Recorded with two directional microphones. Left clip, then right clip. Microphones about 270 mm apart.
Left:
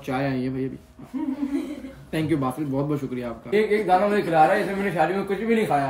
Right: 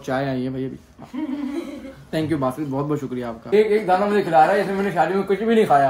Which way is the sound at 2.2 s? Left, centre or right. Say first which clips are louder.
Right 1 dB; centre.